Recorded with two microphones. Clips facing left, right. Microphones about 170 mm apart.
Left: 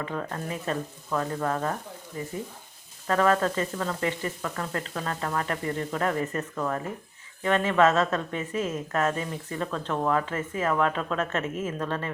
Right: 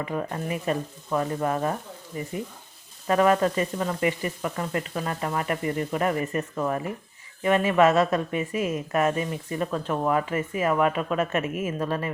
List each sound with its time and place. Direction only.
0.0 s speech: 15° right (ahead or behind)